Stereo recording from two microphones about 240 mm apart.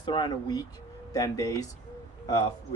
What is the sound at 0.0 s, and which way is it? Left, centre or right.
A man's voice, centre.